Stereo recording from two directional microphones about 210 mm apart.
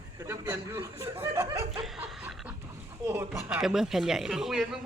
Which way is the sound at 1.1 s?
10° right (ahead or behind).